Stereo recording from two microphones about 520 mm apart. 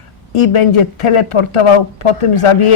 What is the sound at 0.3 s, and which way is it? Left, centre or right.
Speech, left.